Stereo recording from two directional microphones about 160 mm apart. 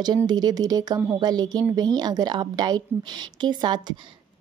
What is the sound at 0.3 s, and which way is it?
A woman's voice, 25° right (ahead or behind).